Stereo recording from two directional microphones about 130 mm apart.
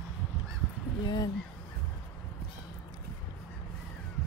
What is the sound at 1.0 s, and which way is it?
Speech, 35° left (ahead or behind).